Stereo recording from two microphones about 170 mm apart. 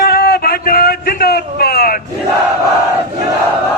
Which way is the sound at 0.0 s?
65° left (ahead or behind).